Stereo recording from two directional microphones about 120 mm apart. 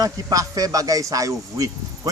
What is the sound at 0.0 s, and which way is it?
A man's voice, 30° right (ahead or behind).